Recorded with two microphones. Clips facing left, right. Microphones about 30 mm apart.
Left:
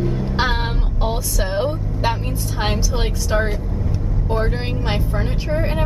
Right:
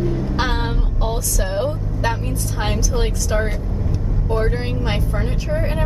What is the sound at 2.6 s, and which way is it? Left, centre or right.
Speech, left.